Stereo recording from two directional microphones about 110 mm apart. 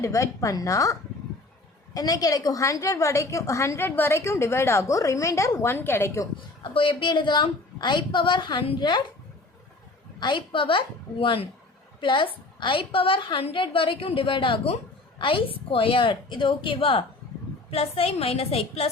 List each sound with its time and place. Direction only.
0.0 s a woman's voice: 30° left (ahead or behind)
6.6 s a woman's voice: 50° left (ahead or behind)
10.2 s a woman's voice: 45° left (ahead or behind); by 18.9 s 65° left (ahead or behind)